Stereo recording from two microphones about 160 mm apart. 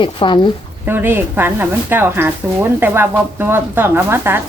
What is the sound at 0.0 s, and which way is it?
Speech, 30° left (ahead or behind).